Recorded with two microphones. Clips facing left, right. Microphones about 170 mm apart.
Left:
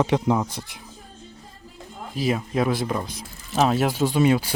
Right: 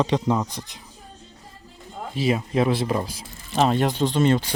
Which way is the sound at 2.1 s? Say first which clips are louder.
Right 1 dB; centre (ahead or behind).